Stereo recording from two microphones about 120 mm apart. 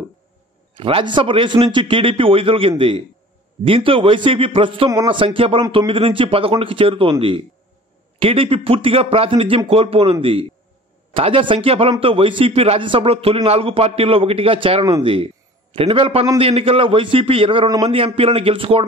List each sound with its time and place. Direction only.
0.7 s a man's voice: 45° right (ahead or behind)
11.1 s a man's voice: 45° right (ahead or behind)